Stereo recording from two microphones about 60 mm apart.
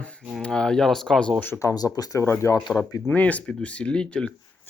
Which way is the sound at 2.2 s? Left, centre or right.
Left.